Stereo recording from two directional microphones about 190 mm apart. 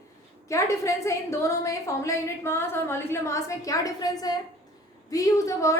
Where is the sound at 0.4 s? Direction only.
15° left (ahead or behind).